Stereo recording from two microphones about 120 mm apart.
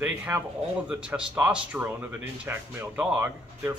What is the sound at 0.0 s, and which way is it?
Speech, 15° right (ahead or behind).